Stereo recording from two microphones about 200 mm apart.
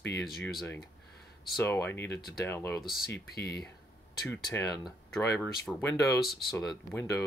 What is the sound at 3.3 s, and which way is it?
Speech, 55° left (ahead or behind).